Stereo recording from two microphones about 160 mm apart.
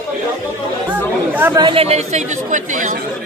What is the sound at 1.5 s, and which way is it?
Speech, 35° right (ahead or behind).